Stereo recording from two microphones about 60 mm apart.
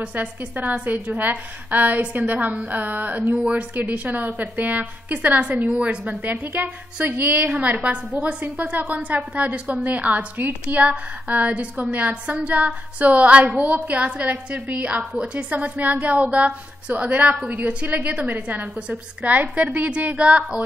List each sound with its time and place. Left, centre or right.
0.0 s a woman's voice: right